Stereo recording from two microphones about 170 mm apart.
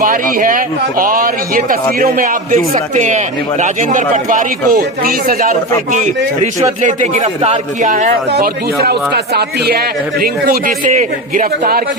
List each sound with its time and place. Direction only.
0.0 s a man's voice: 50° right (ahead or behind)
5.9 s a man's voice: 45° right (ahead or behind)
8.3 s a man's voice: 70° right (ahead or behind); by 11.8 s 50° right (ahead or behind)